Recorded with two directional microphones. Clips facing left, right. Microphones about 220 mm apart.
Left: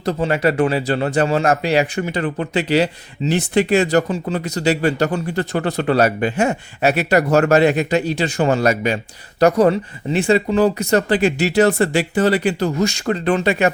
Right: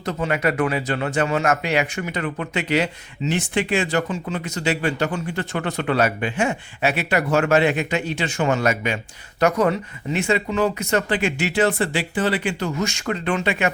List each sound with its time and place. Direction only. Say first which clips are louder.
0.0 s speech: left 5 dB; 35° left (ahead or behind)